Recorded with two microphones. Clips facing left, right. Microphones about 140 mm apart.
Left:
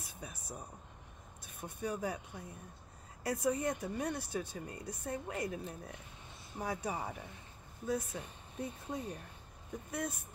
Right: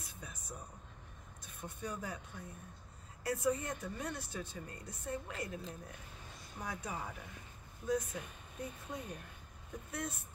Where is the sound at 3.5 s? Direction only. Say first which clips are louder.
Left 6 dB; 15° left (ahead or behind).